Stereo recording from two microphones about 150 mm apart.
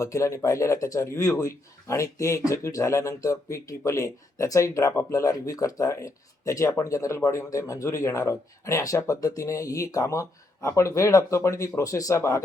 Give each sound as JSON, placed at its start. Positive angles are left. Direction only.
{"t": 0.0, "sound": "speech", "side_deg": 20}